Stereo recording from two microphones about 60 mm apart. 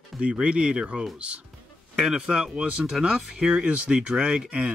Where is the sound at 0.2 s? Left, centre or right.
Centre.